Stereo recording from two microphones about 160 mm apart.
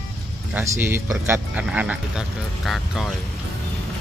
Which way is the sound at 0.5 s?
15° right (ahead or behind).